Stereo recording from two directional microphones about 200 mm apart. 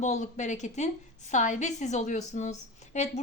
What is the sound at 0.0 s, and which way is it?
A woman's voice, 35° left (ahead or behind).